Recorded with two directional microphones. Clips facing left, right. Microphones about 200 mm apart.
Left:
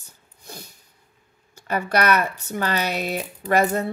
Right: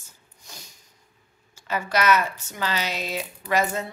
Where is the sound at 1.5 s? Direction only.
60° left (ahead or behind).